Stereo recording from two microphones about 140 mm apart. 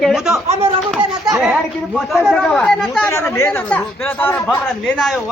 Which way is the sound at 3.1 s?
20° left (ahead or behind).